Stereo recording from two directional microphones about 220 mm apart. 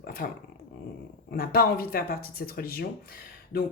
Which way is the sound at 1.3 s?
45° left (ahead or behind).